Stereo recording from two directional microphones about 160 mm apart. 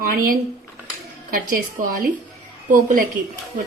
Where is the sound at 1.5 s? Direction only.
65° right (ahead or behind).